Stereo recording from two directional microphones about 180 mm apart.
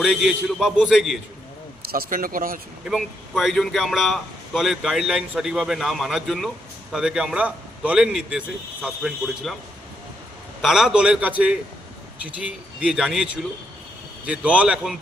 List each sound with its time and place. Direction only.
0.0 s a man's voice: centre (ahead or behind)
1.9 s speech: 50° right (ahead or behind)
2.8 s a man's voice: centre (ahead or behind)
10.6 s a man's voice: centre (ahead or behind)